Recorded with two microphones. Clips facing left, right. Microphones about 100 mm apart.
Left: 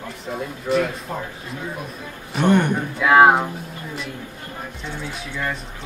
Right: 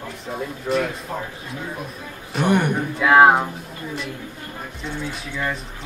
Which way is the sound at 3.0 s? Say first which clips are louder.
Even; centre (ahead or behind).